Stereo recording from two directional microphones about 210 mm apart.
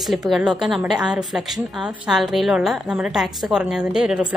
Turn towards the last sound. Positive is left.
turn(degrees=-5)  # may be behind; listen again after turning